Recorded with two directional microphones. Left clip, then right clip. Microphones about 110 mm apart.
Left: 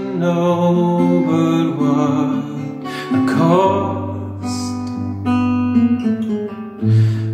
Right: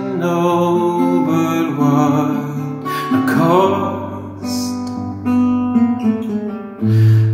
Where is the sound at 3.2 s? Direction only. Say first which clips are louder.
Right 1 dB; 5° left (ahead or behind).